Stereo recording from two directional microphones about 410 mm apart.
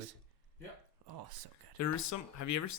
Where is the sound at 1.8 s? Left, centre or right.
Left.